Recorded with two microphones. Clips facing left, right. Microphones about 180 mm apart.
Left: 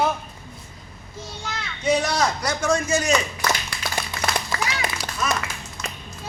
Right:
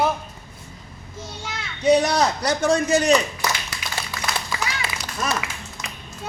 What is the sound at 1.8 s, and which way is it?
A man's voice, 40° right (ahead or behind).